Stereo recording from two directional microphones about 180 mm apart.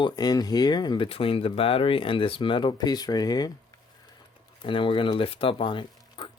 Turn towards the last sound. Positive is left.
turn(degrees=25)  # may be behind; listen again after turning